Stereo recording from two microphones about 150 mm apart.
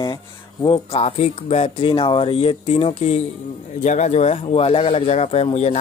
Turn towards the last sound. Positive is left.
turn(degrees=45)  # may be behind; listen again after turning